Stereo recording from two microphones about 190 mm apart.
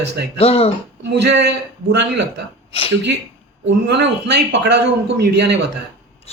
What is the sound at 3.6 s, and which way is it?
A man's voice, 70° right (ahead or behind).